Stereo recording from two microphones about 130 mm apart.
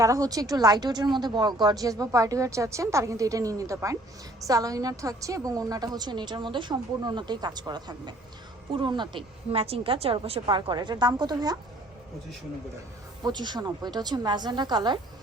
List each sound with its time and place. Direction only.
0.0 s a woman's voice: 25° right (ahead or behind)
13.2 s a woman's voice: 35° right (ahead or behind)